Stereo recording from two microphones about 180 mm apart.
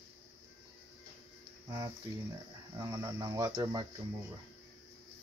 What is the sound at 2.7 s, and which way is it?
Speech, 20° right (ahead or behind).